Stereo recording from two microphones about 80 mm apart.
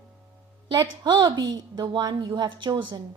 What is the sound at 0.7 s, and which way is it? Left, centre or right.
A woman's voice, right.